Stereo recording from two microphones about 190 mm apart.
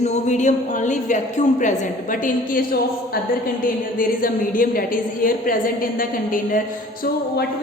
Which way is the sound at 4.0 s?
45° left (ahead or behind).